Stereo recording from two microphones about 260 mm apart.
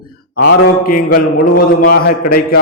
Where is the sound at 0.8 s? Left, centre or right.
Left.